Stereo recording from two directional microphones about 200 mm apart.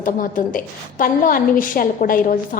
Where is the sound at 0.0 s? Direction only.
40° left (ahead or behind).